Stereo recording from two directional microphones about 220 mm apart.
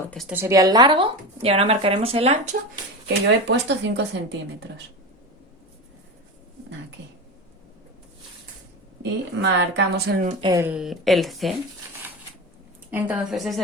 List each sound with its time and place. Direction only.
0.1 s speech: centre (ahead or behind)
0.3 s speech: 15° right (ahead or behind); by 2.6 s 30° right (ahead or behind)
3.1 s speech: 50° right (ahead or behind)
9.4 s speech: 50° right (ahead or behind)
10.4 s speech: 15° right (ahead or behind)
10.7 s speech: centre (ahead or behind)
12.9 s speech: 5° right (ahead or behind)